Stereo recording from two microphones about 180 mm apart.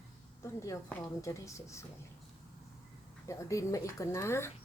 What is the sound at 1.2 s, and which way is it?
Speech, 15° left (ahead or behind).